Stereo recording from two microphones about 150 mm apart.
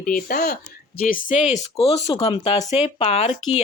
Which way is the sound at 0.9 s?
70° left (ahead or behind).